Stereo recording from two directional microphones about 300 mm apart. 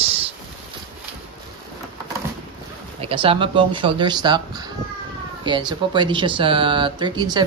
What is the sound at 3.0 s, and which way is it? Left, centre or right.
Speech, centre.